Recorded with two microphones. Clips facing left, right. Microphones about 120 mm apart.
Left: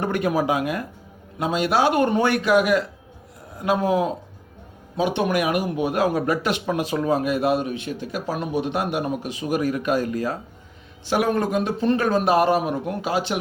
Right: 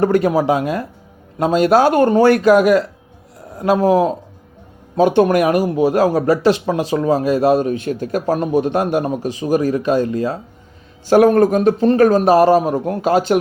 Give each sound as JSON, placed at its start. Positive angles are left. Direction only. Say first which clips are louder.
{"t": 0.0, "sound": "speech", "louder": "right 8 dB", "side_deg": -35}
{"t": 11.0, "sound": "speech", "louder": "right 10 dB", "side_deg": -45}